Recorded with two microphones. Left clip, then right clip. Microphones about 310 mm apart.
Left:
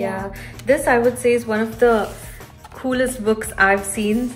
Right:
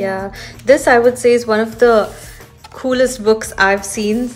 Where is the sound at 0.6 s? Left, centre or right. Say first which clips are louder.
Right 6 dB; centre.